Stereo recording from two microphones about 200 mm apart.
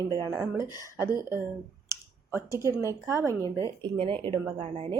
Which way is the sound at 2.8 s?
15° right (ahead or behind).